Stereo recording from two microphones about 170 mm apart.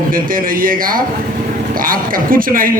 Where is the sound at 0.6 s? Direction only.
55° right (ahead or behind).